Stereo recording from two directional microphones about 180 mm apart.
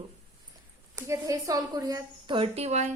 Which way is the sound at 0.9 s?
15° right (ahead or behind).